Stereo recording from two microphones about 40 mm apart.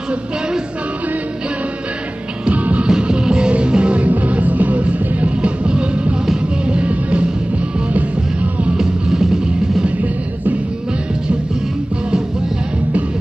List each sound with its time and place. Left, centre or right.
2.5 s music: right
2.9 s music: right
8.7 s music: centre